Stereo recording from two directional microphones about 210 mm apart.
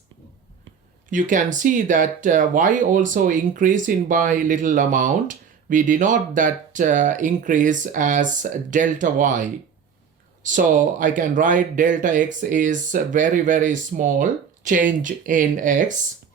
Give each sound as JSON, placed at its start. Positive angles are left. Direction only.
{"t": 1.1, "sound": "speech", "side_deg": -35}
{"t": 10.4, "sound": "speech", "side_deg": -40}